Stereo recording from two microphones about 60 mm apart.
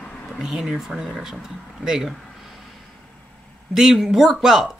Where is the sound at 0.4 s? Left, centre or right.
Centre.